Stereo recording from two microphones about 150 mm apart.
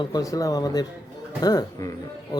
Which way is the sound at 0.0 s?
25° left (ahead or behind).